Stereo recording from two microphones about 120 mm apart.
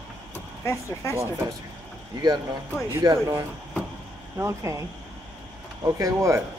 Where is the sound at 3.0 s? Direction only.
25° right (ahead or behind).